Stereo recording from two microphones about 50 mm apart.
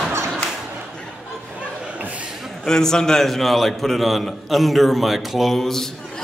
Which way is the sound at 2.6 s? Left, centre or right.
Centre.